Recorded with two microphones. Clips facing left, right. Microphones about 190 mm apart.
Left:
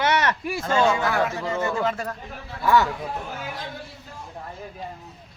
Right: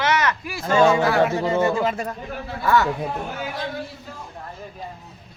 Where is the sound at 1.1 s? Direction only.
30° right (ahead or behind).